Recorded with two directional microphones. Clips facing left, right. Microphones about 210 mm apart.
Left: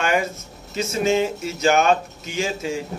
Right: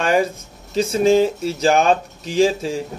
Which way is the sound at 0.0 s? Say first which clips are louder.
Right 4 dB; 30° right (ahead or behind).